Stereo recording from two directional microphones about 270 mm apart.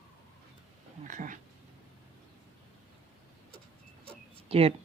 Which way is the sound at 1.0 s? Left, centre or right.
Right.